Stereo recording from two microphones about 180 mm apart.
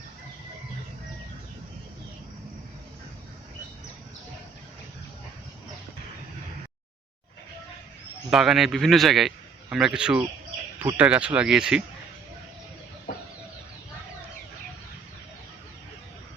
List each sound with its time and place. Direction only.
8.3 s a man's voice: centre (ahead or behind)